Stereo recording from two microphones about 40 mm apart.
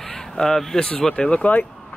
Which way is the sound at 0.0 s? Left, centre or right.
Centre.